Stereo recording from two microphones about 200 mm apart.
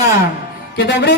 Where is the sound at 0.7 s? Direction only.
60° left (ahead or behind).